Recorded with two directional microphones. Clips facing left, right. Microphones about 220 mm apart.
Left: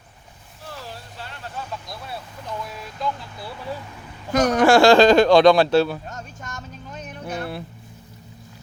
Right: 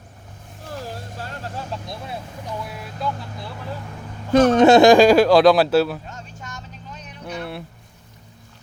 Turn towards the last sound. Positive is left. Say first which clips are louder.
# left 1 dB
turn(degrees=0)  # may be behind; listen again after turning